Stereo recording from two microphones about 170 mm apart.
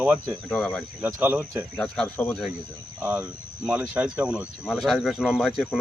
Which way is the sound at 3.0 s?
10° right (ahead or behind).